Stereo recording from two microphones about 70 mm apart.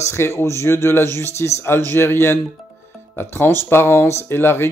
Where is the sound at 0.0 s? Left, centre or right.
Left.